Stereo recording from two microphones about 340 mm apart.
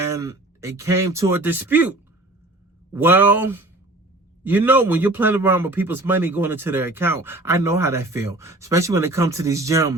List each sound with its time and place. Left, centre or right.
0.0 s a man's voice: centre